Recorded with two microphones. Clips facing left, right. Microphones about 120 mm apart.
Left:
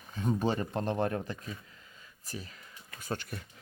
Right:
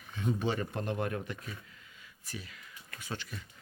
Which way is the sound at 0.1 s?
40° left (ahead or behind).